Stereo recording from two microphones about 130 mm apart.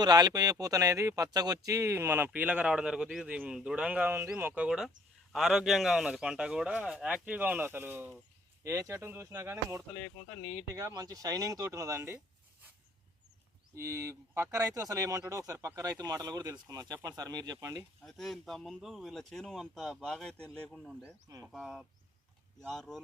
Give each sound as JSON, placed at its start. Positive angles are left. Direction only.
{"t": 0.0, "sound": "speech", "side_deg": -30}
{"t": 13.7, "sound": "speech", "side_deg": -20}
{"t": 18.0, "sound": "speech", "side_deg": 0}